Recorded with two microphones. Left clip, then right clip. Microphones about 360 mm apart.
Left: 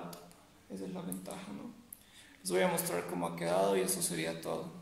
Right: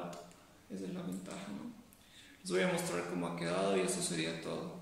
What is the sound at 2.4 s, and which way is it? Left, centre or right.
A man's voice, centre.